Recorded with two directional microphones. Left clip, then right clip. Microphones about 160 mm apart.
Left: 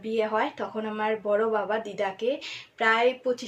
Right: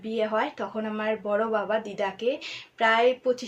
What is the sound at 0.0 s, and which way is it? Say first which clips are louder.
Speech: even; 10° right (ahead or behind).